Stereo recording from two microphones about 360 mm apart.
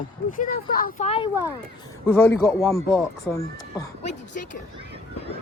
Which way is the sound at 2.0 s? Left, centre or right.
Centre.